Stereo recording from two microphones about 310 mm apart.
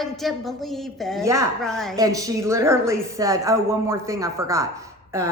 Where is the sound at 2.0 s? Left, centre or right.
Centre.